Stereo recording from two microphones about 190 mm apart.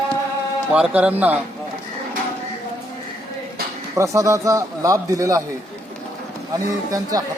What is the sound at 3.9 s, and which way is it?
A man's voice, 15° right (ahead or behind).